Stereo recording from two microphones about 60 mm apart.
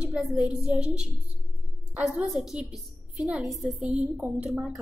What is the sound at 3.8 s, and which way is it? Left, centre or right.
Speech, right.